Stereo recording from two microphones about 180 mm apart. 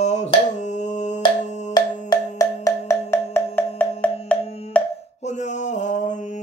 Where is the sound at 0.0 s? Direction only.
40° left (ahead or behind).